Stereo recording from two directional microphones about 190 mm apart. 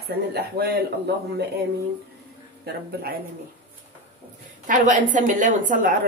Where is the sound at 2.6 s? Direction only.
55° right (ahead or behind).